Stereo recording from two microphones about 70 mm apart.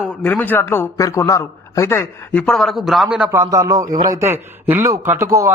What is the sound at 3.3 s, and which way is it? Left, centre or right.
Speech, right.